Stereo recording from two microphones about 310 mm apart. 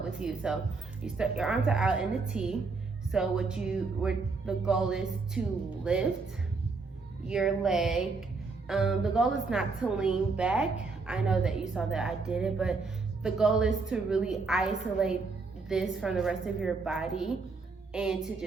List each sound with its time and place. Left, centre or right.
0.2 s a woman's voice: centre
7.3 s a woman's voice: centre